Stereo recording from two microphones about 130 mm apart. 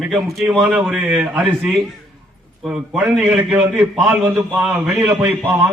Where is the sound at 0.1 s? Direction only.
Centre (ahead or behind).